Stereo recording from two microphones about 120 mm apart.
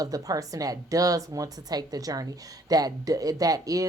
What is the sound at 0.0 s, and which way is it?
Speech, 30° right (ahead or behind).